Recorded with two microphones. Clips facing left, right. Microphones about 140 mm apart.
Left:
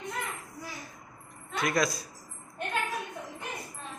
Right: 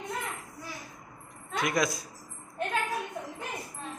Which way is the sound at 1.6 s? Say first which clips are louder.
Even; 15° right (ahead or behind).